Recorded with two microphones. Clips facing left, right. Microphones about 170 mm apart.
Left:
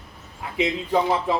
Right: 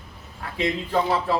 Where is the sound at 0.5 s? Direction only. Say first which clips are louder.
Left 2 dB; 15° left (ahead or behind).